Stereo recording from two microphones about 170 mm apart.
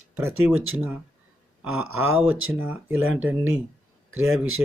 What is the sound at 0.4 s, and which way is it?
Speech, centre (ahead or behind).